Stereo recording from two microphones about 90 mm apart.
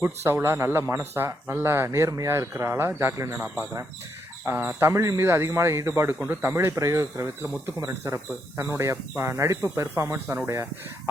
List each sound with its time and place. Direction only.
0.0 s speech: 25° right (ahead or behind)
4.4 s speech: 25° right (ahead or behind)